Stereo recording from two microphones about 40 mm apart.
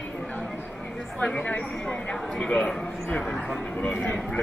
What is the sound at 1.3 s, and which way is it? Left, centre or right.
Speech, left.